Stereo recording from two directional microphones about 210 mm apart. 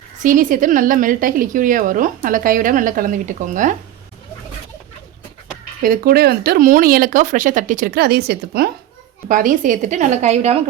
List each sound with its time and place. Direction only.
0.2 s a woman's voice: 40° right (ahead or behind)
5.8 s a woman's voice: 45° right (ahead or behind)